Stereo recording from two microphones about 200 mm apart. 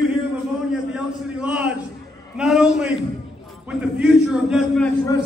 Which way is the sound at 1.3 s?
5° right (ahead or behind).